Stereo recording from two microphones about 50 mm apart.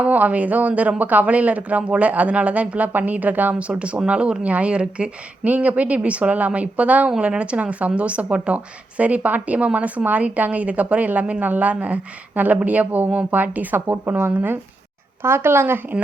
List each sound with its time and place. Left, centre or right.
0.0 s speech: right
13.8 s speech: right
15.2 s speech: right